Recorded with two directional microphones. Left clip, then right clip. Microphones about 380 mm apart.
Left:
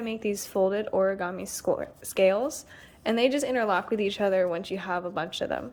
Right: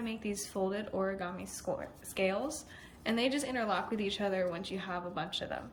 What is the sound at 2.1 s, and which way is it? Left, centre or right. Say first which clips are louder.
A woman's voice: left 10 dB; centre.